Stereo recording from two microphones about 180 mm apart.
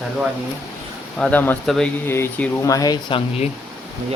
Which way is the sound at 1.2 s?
10° left (ahead or behind).